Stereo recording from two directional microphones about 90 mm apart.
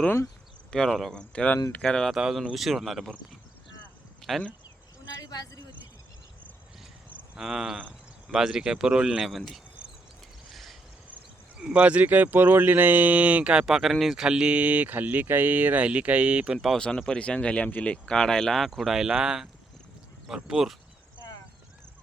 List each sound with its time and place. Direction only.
0.7 s speech: 5° left (ahead or behind)
1.3 s speech: 10° left (ahead or behind)
2.1 s speech: 5° right (ahead or behind)
4.2 s speech: 5° left (ahead or behind)
5.0 s vehicle: 50° left (ahead or behind)
7.3 s speech: 5° right (ahead or behind)
10.5 s mechanisms: centre (ahead or behind)
11.6 s speech: 15° right (ahead or behind)
16.6 s speech: 5° left (ahead or behind)